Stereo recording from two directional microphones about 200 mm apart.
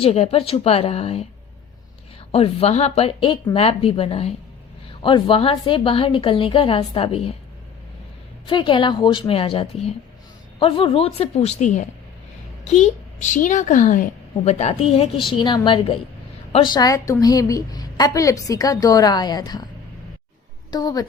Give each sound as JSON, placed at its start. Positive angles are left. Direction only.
{"t": 0.0, "sound": "a woman's voice", "side_deg": 30}
{"t": 2.3, "sound": "a woman's voice", "side_deg": 30}
{"t": 8.4, "sound": "a woman's voice", "side_deg": 25}
{"t": 20.7, "sound": "a woman's voice", "side_deg": 20}